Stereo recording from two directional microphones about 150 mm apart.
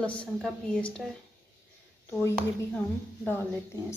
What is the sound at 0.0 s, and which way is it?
A woman's voice, 10° left (ahead or behind).